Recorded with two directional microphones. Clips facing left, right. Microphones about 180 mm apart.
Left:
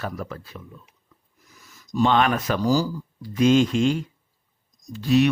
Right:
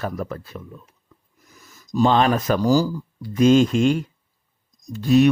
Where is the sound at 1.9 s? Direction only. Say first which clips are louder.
Right 2 dB; 35° right (ahead or behind).